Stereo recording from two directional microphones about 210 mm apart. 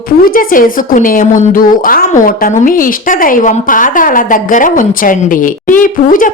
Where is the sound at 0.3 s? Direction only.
40° left (ahead or behind).